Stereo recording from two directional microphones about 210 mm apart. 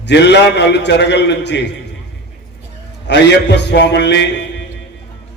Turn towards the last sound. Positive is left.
turn(degrees=55)  # may be behind; listen again after turning